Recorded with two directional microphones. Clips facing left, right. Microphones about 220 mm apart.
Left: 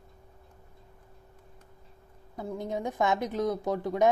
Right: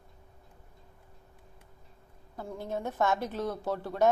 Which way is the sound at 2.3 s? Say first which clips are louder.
Left 3 dB; 15° left (ahead or behind).